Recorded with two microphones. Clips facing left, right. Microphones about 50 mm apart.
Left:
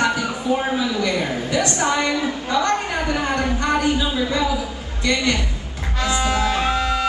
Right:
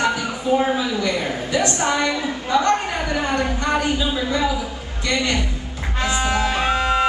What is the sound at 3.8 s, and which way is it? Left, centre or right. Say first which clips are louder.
Speech: left 1 dB; right.